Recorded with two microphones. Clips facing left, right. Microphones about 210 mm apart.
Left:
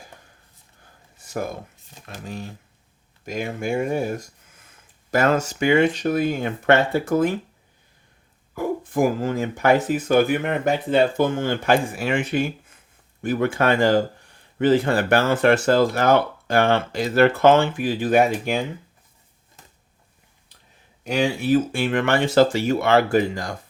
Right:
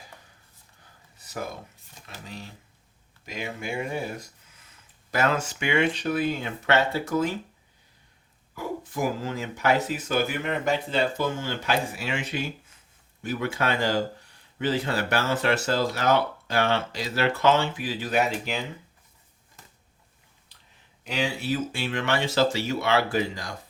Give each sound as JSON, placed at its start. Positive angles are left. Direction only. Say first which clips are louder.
{"t": 1.2, "sound": "a sound", "louder": "left 6 dB", "side_deg": 50}
{"t": 2.2, "sound": "speech", "louder": "left 8 dB", "side_deg": 50}
{"t": 8.5, "sound": "speech", "louder": "left 8 dB", "side_deg": 50}
{"t": 21.0, "sound": "speech", "louder": "left 7 dB", "side_deg": 45}